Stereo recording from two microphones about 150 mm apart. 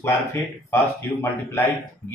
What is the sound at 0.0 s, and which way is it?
A man's voice, 15° left (ahead or behind).